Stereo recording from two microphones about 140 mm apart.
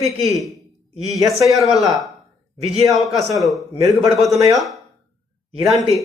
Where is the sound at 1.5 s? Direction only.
Centre (ahead or behind).